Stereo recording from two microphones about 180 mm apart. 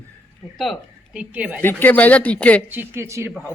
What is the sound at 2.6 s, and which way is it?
Speech, 10° right (ahead or behind).